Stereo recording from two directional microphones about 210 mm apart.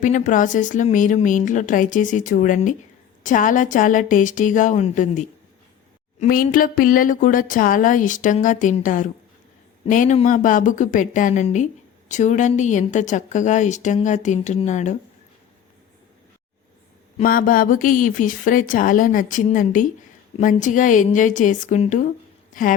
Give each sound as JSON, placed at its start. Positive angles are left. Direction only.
{"t": 0.0, "sound": "speech", "side_deg": 35}
{"t": 17.2, "sound": "speech", "side_deg": 40}